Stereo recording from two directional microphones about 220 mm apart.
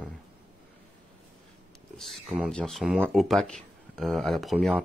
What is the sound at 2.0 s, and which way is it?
Speech, centre (ahead or behind).